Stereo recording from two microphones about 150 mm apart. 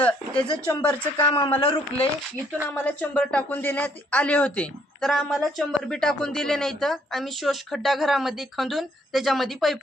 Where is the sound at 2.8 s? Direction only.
10° left (ahead or behind).